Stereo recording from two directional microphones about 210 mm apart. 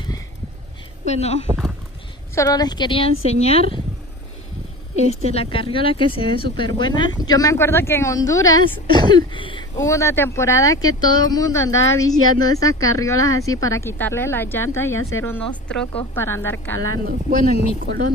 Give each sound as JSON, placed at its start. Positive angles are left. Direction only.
{"t": 1.0, "sound": "speech", "side_deg": 30}
{"t": 2.3, "sound": "a woman's voice", "side_deg": 15}
{"t": 5.0, "sound": "a woman's voice", "side_deg": 30}
{"t": 17.8, "sound": "speech", "side_deg": -45}